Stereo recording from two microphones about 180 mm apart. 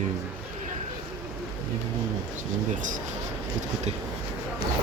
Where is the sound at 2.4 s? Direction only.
45° right (ahead or behind).